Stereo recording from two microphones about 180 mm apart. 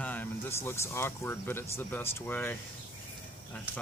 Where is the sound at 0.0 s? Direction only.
10° left (ahead or behind).